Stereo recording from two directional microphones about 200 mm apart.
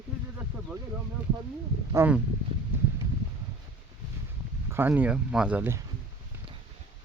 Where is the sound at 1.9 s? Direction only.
10° right (ahead or behind).